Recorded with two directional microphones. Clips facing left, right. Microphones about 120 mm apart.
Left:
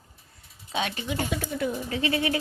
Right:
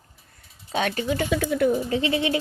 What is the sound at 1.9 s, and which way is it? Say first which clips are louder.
Speech: right 3 dB; 30° right (ahead or behind).